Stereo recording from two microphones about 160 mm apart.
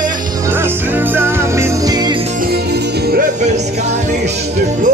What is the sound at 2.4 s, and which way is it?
Music, 80° right.